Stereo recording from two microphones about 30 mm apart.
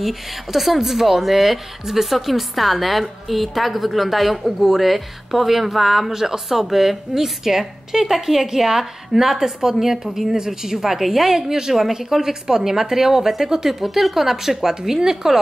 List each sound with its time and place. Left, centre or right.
0.0 s a woman's voice: centre
13.7 s a woman's voice: centre